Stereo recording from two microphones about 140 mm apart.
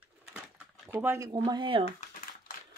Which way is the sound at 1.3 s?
30° right (ahead or behind).